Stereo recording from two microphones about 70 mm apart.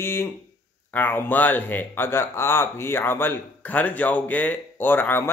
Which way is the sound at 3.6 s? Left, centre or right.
Left.